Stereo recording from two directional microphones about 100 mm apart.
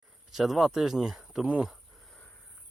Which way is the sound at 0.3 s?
Centre (ahead or behind).